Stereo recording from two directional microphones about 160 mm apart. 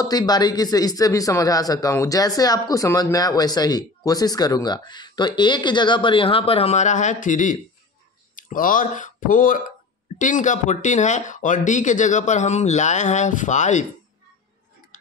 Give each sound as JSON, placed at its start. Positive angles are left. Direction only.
{"t": 0.0, "sound": "a man's voice", "side_deg": 25}